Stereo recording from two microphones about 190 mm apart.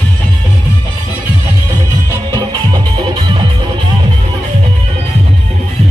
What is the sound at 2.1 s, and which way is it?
Music, 20° right (ahead or behind).